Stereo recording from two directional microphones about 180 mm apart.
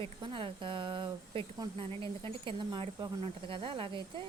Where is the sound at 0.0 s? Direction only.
30° right (ahead or behind).